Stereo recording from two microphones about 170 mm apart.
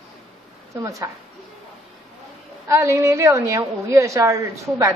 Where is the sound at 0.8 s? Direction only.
20° right (ahead or behind).